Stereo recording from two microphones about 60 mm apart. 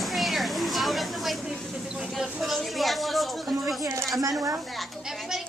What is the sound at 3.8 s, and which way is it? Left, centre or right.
Speech, right.